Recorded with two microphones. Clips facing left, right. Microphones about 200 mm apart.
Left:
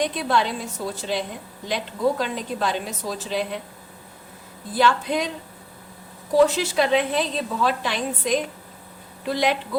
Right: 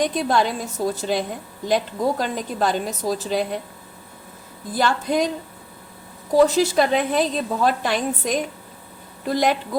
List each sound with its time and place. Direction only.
0.0 s a woman's voice: 45° right (ahead or behind)
4.7 s a woman's voice: 45° right (ahead or behind)
6.3 s a woman's voice: 40° right (ahead or behind)